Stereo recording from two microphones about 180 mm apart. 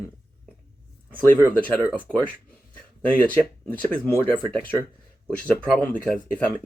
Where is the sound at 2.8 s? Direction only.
5° left (ahead or behind).